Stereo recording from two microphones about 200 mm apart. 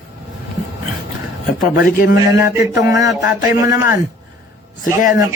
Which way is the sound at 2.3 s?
15° right (ahead or behind).